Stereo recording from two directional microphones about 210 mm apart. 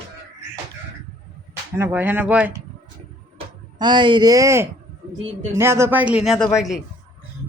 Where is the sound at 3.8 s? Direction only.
20° right (ahead or behind); by 6.8 s centre (ahead or behind).